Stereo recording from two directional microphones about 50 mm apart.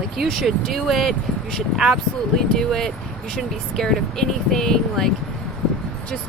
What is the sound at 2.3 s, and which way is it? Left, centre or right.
Speech, centre.